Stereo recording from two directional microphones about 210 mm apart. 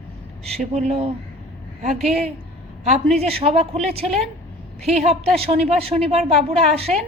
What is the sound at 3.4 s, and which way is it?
Speech, 30° right (ahead or behind).